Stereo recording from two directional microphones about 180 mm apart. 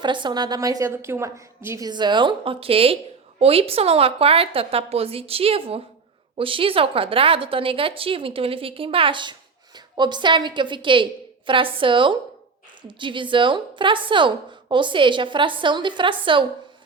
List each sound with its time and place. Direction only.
0.0 s a woman's voice: 25° right (ahead or behind)